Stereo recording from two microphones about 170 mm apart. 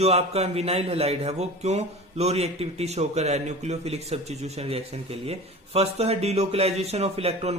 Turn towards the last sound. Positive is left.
turn(degrees=-35)  # may be behind; listen again after turning